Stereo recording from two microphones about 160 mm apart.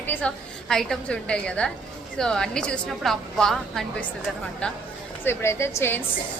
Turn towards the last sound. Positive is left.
turn(degrees=15)  # may be behind; listen again after turning